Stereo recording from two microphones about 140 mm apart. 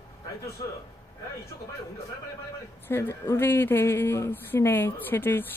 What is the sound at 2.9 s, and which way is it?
Speech, 15° left (ahead or behind).